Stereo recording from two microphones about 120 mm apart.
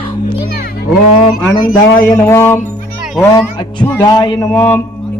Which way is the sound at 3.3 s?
40° left (ahead or behind).